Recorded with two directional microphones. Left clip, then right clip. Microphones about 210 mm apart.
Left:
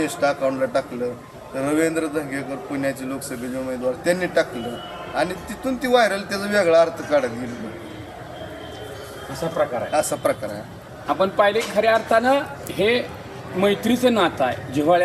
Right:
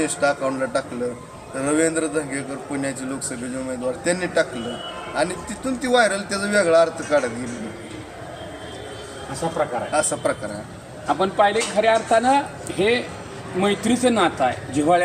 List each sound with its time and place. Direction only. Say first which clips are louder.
0.0 s a man's voice: even; centre (ahead or behind)
4.0 s a man's voice: left 1 dB; centre (ahead or behind)
9.6 s a man's voice: left 1 dB; 15° left (ahead or behind)